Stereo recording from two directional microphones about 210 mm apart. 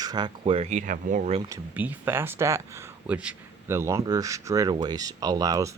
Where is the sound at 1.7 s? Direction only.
10° right (ahead or behind).